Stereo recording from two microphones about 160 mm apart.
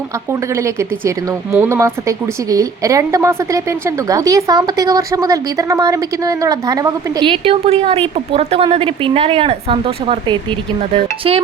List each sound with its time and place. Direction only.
0.3 s speech: 15° right (ahead or behind)
7.3 s a woman's voice: 35° right (ahead or behind)